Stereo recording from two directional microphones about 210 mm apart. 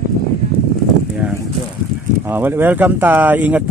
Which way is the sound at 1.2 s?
10° right (ahead or behind).